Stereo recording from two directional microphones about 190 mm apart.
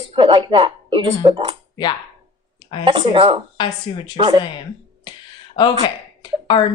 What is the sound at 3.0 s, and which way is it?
Speech, 30° right (ahead or behind).